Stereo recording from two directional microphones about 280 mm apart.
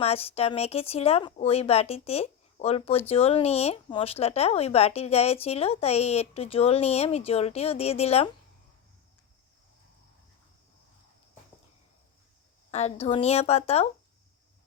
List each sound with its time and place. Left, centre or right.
0.0 s speech: left
12.7 s speech: left